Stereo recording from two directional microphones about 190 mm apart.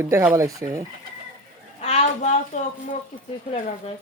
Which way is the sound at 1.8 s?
35° left (ahead or behind).